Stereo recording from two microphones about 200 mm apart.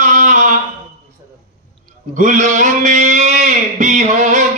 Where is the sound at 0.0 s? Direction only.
40° right (ahead or behind).